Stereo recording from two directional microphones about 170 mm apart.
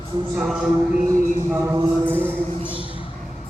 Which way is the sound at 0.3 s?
Centre (ahead or behind).